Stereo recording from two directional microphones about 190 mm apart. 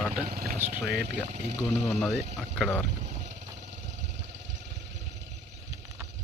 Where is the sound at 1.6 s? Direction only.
5° left (ahead or behind).